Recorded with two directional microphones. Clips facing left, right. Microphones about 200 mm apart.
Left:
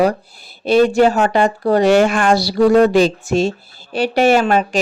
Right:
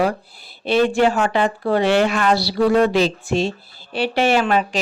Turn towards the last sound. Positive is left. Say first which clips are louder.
# left 4 dB
turn(degrees=45)  # may be behind; listen again after turning